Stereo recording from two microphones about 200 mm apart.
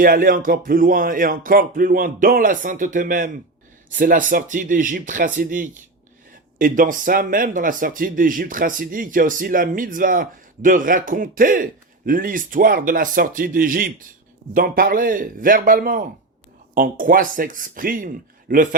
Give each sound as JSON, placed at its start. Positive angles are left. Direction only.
{"t": 0.0, "sound": "a man's voice", "side_deg": -45}